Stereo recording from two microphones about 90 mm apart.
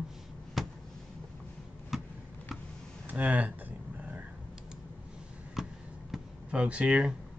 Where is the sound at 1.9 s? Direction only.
5° right (ahead or behind).